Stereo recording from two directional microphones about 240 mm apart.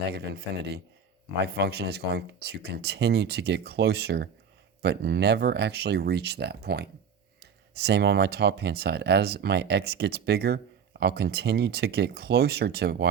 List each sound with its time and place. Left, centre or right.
0.1 s speech: right